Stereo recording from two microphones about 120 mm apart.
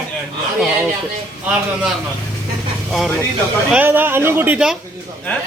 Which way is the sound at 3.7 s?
15° right (ahead or behind).